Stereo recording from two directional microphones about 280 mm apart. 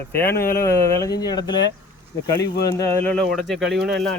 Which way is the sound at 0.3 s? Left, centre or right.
Left.